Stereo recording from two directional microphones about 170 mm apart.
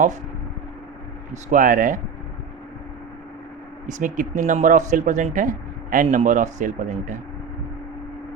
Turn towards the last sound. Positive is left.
turn(degrees=-50)  # may be behind; listen again after turning